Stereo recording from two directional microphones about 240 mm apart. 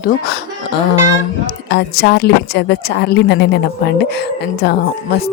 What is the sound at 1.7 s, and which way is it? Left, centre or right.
A woman's voice, left.